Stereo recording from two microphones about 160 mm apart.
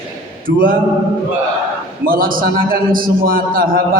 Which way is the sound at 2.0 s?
60° right (ahead or behind).